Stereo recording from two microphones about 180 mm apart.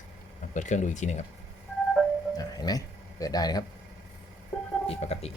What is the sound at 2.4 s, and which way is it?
Speech, 20° left (ahead or behind).